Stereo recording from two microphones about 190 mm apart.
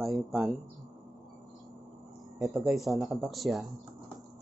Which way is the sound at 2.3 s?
Centre (ahead or behind).